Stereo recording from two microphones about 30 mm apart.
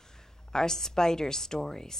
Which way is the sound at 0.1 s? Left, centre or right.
Centre.